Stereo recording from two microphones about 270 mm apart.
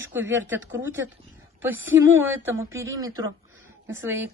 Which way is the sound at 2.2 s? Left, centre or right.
Right.